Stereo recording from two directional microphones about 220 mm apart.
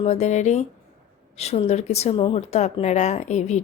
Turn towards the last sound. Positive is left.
turn(degrees=30)  # may be behind; listen again after turning